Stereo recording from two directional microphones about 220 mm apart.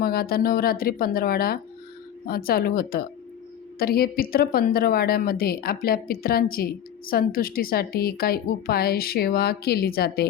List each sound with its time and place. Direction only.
0.0 s a woman's voice: 45° left (ahead or behind)